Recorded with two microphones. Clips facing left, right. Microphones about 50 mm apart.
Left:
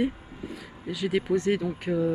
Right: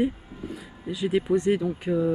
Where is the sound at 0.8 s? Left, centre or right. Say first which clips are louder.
Right 2 dB; right.